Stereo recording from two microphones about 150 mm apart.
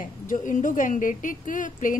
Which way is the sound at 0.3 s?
60° left (ahead or behind).